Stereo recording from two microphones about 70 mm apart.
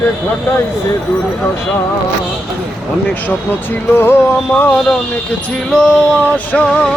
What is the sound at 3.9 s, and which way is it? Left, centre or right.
Music, left.